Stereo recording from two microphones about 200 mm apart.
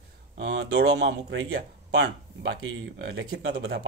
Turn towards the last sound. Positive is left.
turn(degrees=-55)  # may be behind; listen again after turning